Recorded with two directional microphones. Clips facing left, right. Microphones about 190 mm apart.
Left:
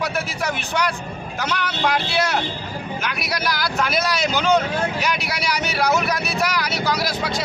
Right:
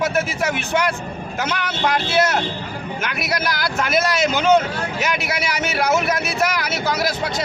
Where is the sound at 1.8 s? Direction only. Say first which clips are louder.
Right 1 dB; centre (ahead or behind).